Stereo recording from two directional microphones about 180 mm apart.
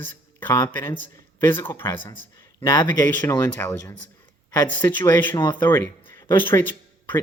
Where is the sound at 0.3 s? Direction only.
10° left (ahead or behind).